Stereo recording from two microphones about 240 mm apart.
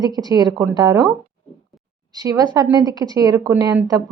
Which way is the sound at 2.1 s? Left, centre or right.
Centre.